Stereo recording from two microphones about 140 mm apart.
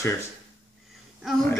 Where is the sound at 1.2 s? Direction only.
Centre (ahead or behind).